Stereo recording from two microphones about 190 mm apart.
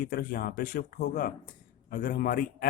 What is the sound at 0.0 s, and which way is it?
Speech, 45° left (ahead or behind).